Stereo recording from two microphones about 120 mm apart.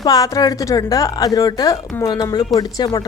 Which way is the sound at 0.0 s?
30° left (ahead or behind).